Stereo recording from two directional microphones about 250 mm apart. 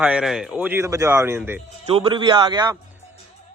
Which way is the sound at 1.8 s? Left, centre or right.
Right.